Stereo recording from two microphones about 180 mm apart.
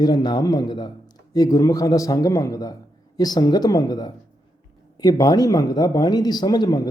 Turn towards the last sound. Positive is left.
turn(degrees=20)  # may be behind; listen again after turning